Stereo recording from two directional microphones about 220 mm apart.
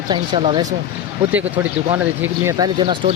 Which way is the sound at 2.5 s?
20° right (ahead or behind).